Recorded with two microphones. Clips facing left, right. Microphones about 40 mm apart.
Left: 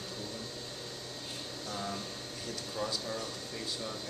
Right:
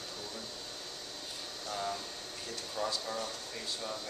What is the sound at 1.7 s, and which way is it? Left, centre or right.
Speech, centre.